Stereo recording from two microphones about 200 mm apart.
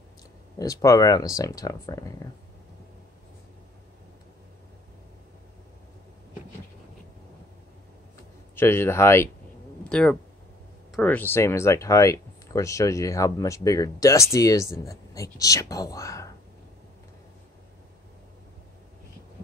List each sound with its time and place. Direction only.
0.6 s speech: 15° left (ahead or behind)
8.5 s speech: 10° left (ahead or behind)